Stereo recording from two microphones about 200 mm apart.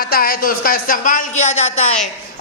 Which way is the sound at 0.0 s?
50° left (ahead or behind).